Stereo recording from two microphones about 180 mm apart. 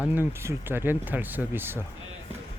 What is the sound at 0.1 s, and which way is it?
Speech, 15° right (ahead or behind).